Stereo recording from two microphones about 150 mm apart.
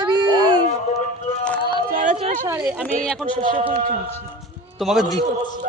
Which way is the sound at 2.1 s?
55° right (ahead or behind).